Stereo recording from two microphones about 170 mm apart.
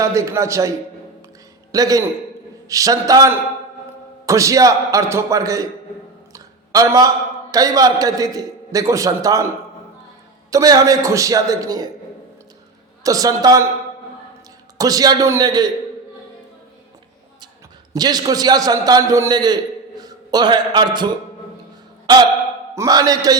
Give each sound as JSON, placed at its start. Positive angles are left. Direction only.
{"t": 0.0, "sound": "a man's voice", "side_deg": -15}
{"t": 6.3, "sound": "a sound", "side_deg": -20}
{"t": 7.5, "sound": "a man's voice", "side_deg": -20}
{"t": 10.5, "sound": "a man's voice", "side_deg": -20}
{"t": 13.0, "sound": "a man's voice", "side_deg": -20}
{"t": 14.8, "sound": "a man's voice", "side_deg": -20}
{"t": 17.9, "sound": "a man's voice", "side_deg": -25}
{"t": 22.7, "sound": "a man's voice", "side_deg": -20}